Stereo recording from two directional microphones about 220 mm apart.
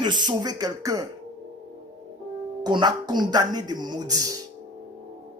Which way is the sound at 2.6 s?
20° right (ahead or behind).